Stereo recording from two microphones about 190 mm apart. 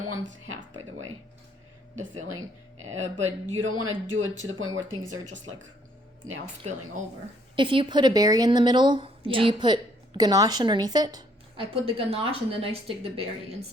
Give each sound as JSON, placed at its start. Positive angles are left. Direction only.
{"t": 0.3, "sound": "speech", "side_deg": -90}
{"t": 2.0, "sound": "speech", "side_deg": -90}
{"t": 7.5, "sound": "a woman's voice", "side_deg": -25}